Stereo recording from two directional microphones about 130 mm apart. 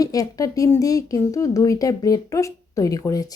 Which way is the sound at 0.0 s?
25° left (ahead or behind).